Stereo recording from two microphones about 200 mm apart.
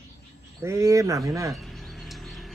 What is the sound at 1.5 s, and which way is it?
Bird, centre (ahead or behind).